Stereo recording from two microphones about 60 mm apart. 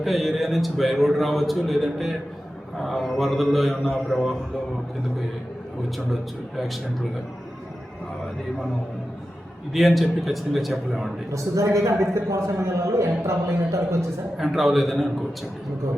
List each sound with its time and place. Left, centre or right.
0.0 s a man's voice: centre
9.7 s a man's voice: centre
11.3 s a man's voice: right
14.3 s a man's voice: centre